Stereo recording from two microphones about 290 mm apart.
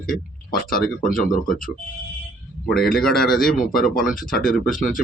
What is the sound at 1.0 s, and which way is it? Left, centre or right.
Speech, left.